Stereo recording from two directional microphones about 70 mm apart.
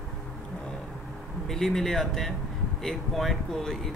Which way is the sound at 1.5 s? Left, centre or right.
Centre.